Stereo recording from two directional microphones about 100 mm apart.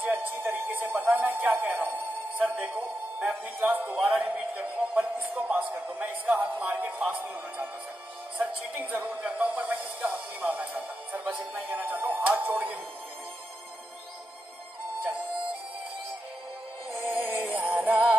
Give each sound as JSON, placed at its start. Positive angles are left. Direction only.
{"t": 0.1, "sound": "a sound", "side_deg": -20}
{"t": 2.7, "sound": "speech", "side_deg": -15}
{"t": 4.0, "sound": "music", "side_deg": 0}
{"t": 4.4, "sound": "speech", "side_deg": -10}
{"t": 16.9, "sound": "music", "side_deg": -20}